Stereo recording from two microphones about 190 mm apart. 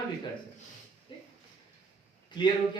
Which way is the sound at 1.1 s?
25° left (ahead or behind).